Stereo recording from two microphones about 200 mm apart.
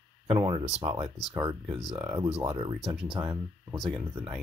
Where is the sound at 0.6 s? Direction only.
30° right (ahead or behind).